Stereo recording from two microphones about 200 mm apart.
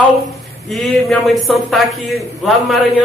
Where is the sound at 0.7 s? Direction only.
Centre (ahead or behind).